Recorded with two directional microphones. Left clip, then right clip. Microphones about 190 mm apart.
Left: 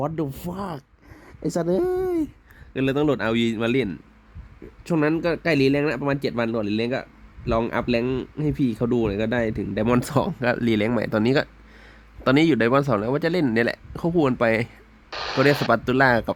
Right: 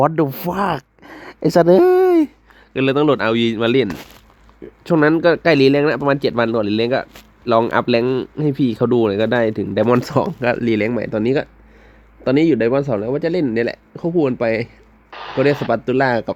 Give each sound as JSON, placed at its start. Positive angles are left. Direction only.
{"t": 0.0, "sound": "speech", "side_deg": -10}
{"t": 2.7, "sound": "a man's voice", "side_deg": 10}